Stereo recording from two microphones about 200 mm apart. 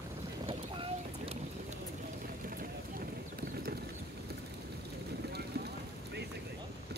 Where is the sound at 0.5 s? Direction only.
25° right (ahead or behind).